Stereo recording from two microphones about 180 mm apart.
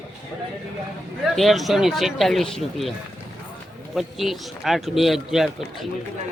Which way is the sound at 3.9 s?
Centre (ahead or behind).